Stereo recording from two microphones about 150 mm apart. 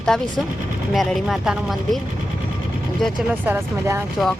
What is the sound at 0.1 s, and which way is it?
A woman's voice, 5° left (ahead or behind).